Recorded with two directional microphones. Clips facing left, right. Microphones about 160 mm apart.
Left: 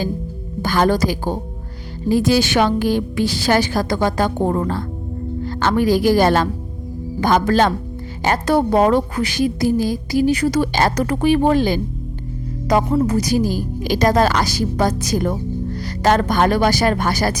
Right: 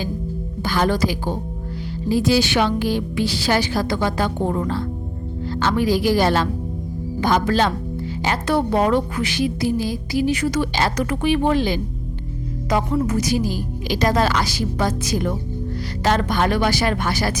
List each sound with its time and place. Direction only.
0.6 s a woman's voice: 45° left (ahead or behind)